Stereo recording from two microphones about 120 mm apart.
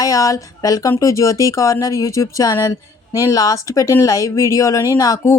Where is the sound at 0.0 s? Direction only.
30° left (ahead or behind).